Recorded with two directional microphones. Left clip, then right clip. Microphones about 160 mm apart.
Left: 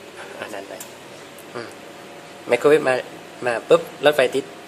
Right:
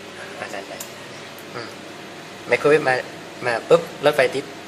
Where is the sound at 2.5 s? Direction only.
50° left (ahead or behind).